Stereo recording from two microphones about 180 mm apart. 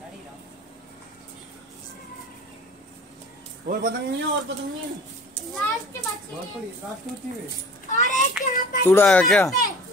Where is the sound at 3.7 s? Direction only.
50° right (ahead or behind).